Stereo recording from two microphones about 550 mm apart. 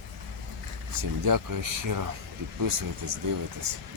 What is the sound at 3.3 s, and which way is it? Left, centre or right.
Speech, right.